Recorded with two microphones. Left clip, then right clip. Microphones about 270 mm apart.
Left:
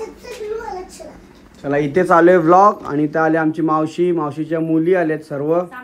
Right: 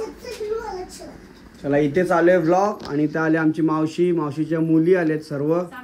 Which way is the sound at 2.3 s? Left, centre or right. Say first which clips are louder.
Left 7 dB; centre.